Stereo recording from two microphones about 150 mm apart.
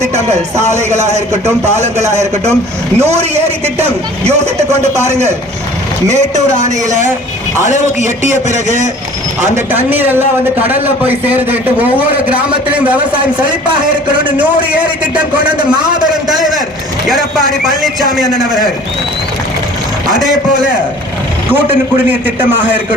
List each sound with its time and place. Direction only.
0.6 s a man's voice: 50° right (ahead or behind)
3.1 s a man's voice: 45° right (ahead or behind)
8.3 s a man's voice: 55° right (ahead or behind)
9.6 s speech: 15° right (ahead or behind)
15.1 s a man's voice: 30° right (ahead or behind)
17.6 s a man's voice: centre (ahead or behind)
21.9 s speech: 15° right (ahead or behind)